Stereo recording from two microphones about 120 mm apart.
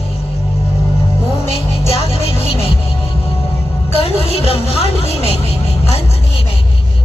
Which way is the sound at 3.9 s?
55° left (ahead or behind).